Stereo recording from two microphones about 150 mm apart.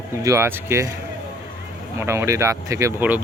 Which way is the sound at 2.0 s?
15° right (ahead or behind).